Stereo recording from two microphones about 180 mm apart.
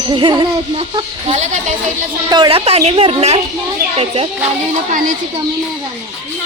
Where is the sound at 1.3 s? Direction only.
40° right (ahead or behind).